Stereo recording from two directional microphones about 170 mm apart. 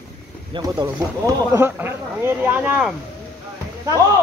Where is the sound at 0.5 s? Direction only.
25° right (ahead or behind); by 2.9 s 10° right (ahead or behind).